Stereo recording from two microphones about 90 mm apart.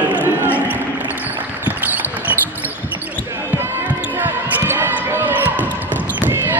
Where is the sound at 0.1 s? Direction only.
20° right (ahead or behind).